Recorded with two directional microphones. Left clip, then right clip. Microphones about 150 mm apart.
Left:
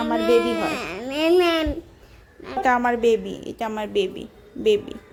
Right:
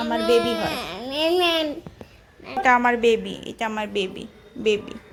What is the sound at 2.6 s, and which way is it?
A woman's voice, 20° left (ahead or behind).